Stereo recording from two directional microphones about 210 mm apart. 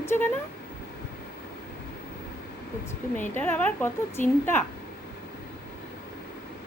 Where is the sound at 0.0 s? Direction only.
10° left (ahead or behind).